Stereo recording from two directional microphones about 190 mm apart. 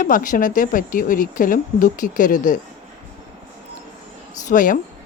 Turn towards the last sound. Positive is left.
turn(degrees=45)  # may be behind; listen again after turning